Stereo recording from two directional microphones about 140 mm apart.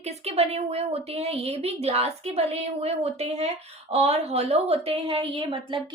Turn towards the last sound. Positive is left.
turn(degrees=-40)  # may be behind; listen again after turning